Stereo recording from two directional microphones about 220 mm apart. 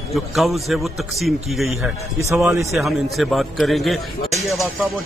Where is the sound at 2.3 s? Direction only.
10° right (ahead or behind).